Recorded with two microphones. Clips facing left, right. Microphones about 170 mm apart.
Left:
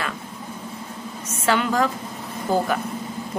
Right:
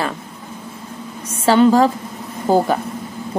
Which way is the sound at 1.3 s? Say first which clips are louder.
Right 9 dB; 30° right (ahead or behind).